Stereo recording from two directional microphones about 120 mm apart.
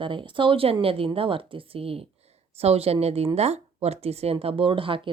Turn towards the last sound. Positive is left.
turn(degrees=-45)  # may be behind; listen again after turning